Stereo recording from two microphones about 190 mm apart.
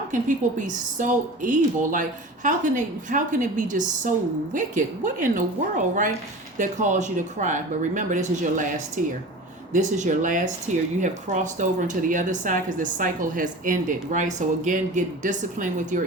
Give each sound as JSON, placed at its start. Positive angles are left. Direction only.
{"t": 0.1, "sound": "speech", "side_deg": -45}